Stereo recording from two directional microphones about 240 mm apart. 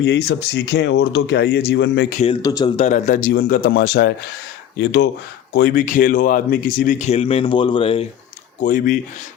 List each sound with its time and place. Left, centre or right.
0.0 s speech: left
2.1 s speech: left
8.6 s speech: left